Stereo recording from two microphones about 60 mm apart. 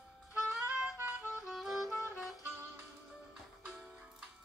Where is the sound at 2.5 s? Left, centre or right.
Right.